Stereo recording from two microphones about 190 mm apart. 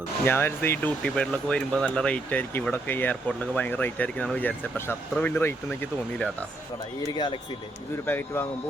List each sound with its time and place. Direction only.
0.3 s speech: 10° left (ahead or behind)
7.1 s speech: 25° left (ahead or behind)
8.0 s speech: 10° left (ahead or behind)